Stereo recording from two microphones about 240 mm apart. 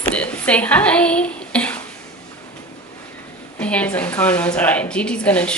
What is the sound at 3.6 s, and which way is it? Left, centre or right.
A woman's voice, centre.